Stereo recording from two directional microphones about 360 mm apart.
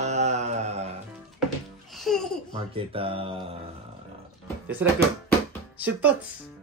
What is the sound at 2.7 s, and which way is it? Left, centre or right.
Speech, centre.